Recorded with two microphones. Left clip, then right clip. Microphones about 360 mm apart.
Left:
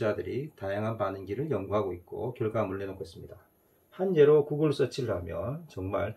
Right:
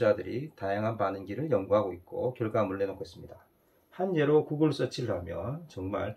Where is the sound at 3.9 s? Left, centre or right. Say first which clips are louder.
Left 4 dB; centre.